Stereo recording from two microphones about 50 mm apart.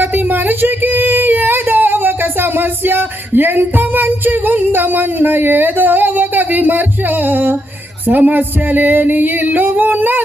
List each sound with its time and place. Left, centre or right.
0.0 s speech: right
7.3 s music: right